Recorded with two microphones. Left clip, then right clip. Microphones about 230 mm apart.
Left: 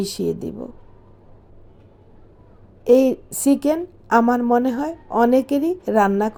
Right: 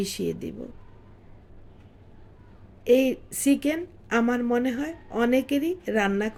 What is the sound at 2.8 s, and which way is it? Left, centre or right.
A woman's voice, centre.